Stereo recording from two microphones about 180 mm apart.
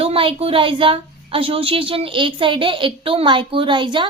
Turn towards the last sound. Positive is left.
turn(degrees=-25)  # may be behind; listen again after turning